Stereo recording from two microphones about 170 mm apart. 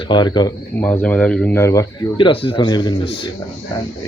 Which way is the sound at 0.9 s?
10° left (ahead or behind).